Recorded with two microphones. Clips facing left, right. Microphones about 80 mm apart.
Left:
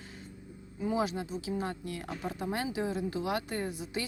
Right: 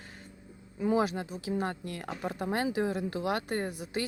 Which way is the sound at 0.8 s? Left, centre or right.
Right.